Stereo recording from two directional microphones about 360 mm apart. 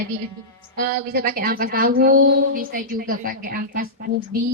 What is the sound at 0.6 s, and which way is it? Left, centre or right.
A woman's voice, right.